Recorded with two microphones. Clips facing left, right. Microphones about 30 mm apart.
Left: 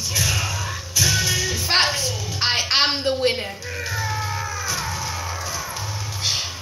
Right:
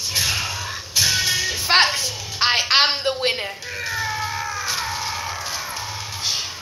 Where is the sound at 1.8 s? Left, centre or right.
Centre.